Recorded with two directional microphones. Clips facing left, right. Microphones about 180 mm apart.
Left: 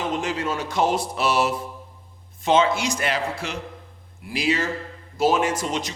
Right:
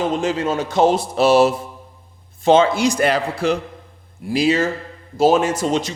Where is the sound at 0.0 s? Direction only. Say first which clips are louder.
Right 6 dB; 30° right (ahead or behind).